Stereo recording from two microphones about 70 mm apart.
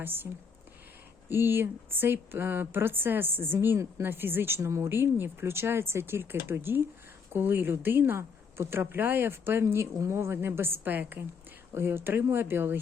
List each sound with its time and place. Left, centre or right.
0.0 s speech: right
1.3 s speech: right